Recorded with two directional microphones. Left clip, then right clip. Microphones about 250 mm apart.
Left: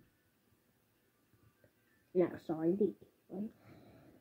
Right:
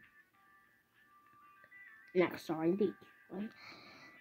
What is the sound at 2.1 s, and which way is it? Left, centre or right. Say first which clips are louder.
Speech: right 1 dB; centre.